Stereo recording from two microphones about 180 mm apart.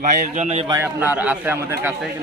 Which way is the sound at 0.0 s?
40° right (ahead or behind).